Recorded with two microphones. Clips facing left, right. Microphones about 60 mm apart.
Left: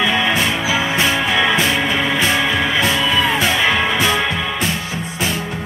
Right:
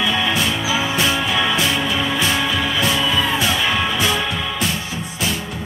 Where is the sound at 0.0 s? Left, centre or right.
Left.